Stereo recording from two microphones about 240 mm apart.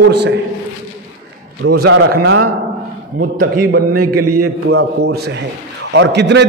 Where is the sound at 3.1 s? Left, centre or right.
Right.